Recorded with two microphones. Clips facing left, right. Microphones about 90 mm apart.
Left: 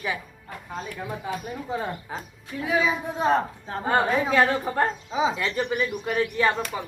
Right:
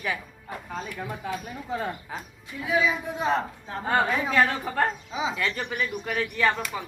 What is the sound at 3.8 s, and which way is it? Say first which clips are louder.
Speech: left 2 dB; 25° left (ahead or behind).